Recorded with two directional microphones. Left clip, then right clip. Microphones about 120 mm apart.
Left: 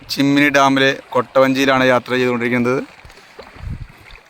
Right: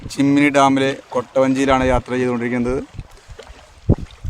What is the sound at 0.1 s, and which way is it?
Speech, 15° left (ahead or behind).